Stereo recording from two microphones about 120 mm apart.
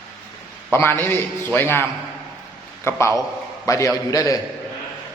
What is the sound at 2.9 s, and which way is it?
A man's voice, 20° left (ahead or behind).